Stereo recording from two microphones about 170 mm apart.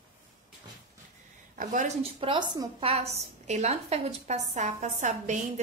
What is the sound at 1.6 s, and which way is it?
Speech, 50° right (ahead or behind).